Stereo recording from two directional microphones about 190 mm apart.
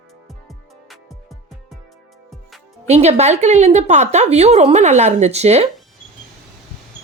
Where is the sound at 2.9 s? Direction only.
35° right (ahead or behind).